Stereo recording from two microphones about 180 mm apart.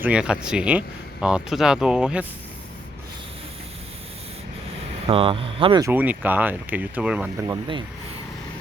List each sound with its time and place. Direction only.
0.0 s speech: 5° right (ahead or behind)
5.0 s speech: 30° right (ahead or behind)
5.8 s speech: 10° right (ahead or behind)